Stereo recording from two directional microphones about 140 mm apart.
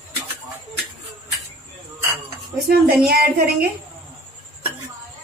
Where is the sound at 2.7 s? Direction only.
90° right.